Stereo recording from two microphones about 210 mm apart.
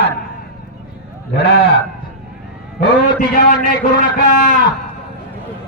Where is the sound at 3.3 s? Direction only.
40° left (ahead or behind).